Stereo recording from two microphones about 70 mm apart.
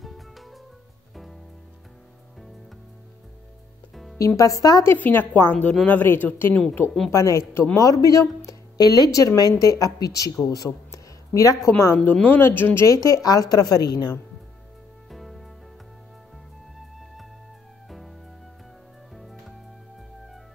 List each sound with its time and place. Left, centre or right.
0.0 s music: centre
3.9 s music: centre
4.4 s a man's voice: left
4.9 s a woman's voice: left
7.1 s a man's voice: left
8.7 s a woman's voice: left
10.9 s a sound: left
11.6 s a man's voice: left
12.0 s a woman's voice: left
12.8 s a woman's voice: left
15.0 s music: centre
16.7 s music: centre